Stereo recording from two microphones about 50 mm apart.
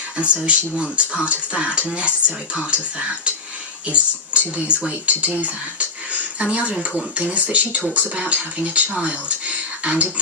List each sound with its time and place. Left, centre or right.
0.2 s speech: right
3.8 s speech: right